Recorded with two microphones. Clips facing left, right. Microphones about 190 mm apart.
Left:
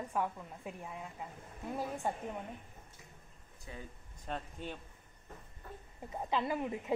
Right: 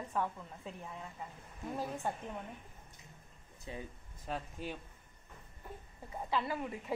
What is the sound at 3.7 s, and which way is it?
Speech, 25° right (ahead or behind).